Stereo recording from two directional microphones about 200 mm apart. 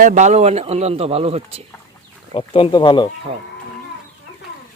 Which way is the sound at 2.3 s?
25° left (ahead or behind).